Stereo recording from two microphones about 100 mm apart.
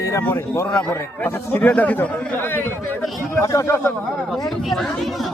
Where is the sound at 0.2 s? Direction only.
20° left (ahead or behind).